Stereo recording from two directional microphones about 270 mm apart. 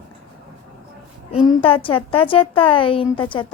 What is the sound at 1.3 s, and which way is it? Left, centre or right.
A woman's voice, centre.